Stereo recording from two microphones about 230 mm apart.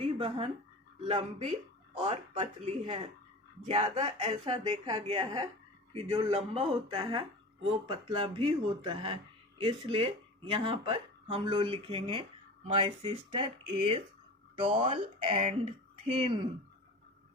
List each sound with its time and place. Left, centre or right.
0.0 s speech: right